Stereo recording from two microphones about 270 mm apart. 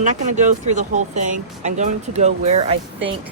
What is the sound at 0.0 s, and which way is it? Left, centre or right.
Speech, right.